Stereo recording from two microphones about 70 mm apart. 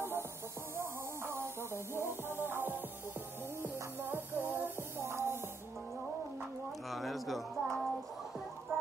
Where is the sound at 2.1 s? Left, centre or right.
Right.